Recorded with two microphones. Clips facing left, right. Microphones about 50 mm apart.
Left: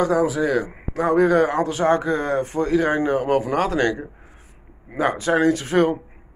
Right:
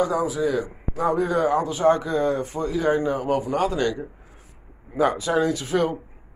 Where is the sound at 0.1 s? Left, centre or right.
Left.